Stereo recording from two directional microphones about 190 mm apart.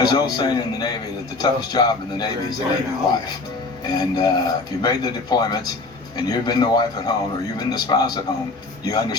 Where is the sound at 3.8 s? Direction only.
20° left (ahead or behind).